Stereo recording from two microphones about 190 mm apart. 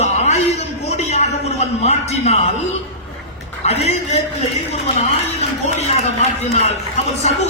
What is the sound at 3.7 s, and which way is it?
A man's voice, 35° left (ahead or behind).